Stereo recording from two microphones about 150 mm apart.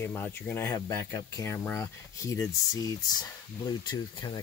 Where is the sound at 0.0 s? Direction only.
15° left (ahead or behind).